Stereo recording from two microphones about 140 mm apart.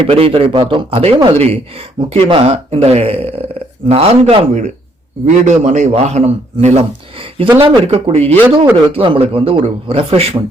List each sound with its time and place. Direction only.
0.0 s a man's voice: 45° right (ahead or behind)
7.6 s a man's voice: 40° right (ahead or behind)